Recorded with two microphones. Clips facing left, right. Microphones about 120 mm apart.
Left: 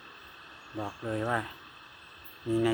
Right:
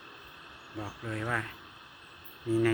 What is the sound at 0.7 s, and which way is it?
Speech, 15° left (ahead or behind).